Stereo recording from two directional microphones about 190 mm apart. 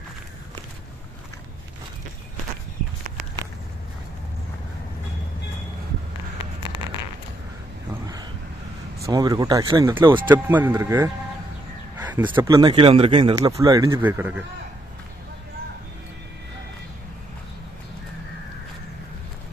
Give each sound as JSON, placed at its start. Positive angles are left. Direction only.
{"t": 9.0, "sound": "speech", "side_deg": -20}
{"t": 10.2, "sound": "speech", "side_deg": -10}
{"t": 12.4, "sound": "speech", "side_deg": -25}